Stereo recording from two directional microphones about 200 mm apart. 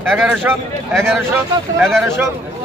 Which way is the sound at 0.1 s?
5° right (ahead or behind).